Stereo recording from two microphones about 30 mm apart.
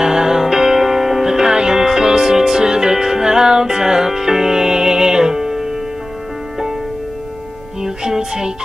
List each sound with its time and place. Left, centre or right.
0.0 s music: centre
7.8 s music: centre